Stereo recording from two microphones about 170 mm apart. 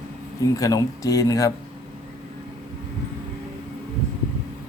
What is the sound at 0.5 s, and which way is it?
Speech, 20° left (ahead or behind).